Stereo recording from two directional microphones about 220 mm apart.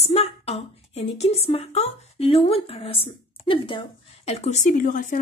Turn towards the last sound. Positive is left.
turn(degrees=35)  # may be behind; listen again after turning